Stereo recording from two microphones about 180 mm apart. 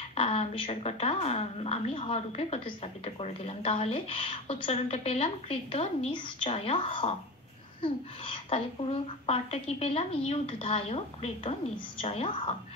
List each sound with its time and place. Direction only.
0.1 s a woman's voice: 35° left (ahead or behind)